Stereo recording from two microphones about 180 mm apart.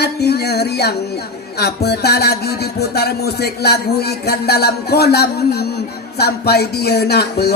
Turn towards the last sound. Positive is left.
turn(degrees=65)  # may be behind; listen again after turning